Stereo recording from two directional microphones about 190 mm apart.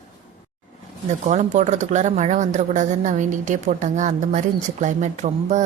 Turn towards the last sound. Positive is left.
turn(degrees=-40)  # may be behind; listen again after turning